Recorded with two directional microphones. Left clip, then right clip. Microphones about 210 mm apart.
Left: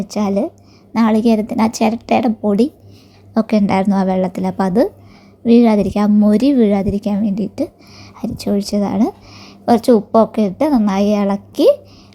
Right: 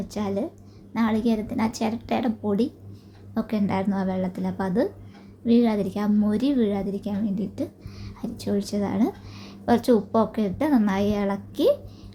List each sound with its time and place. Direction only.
0.0 s a woman's voice: 30° left (ahead or behind)